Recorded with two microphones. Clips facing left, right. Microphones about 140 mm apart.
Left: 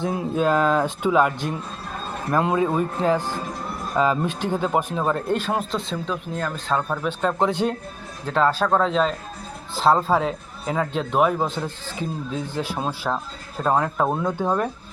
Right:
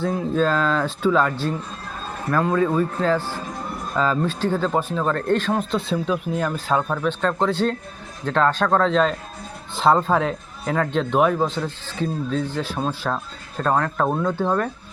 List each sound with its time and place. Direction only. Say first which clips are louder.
0.0 s speech: right 1 dB; 15° left (ahead or behind)
5.7 s speech: right 4 dB; 5° right (ahead or behind)
6.9 s a man's voice: right 1 dB; 10° left (ahead or behind)